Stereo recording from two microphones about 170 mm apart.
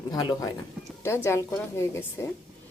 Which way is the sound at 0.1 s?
20° left (ahead or behind).